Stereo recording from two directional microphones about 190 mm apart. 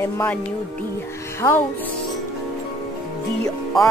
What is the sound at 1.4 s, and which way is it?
Music, 25° left (ahead or behind).